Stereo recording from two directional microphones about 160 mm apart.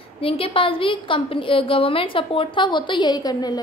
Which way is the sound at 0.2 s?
35° left (ahead or behind).